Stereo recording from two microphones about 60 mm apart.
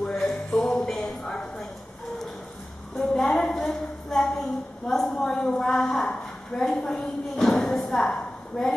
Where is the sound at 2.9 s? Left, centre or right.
Centre.